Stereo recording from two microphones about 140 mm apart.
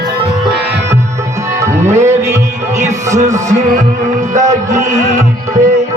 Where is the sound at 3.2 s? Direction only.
60° right (ahead or behind).